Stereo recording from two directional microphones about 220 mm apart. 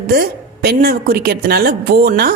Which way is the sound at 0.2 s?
45° right (ahead or behind).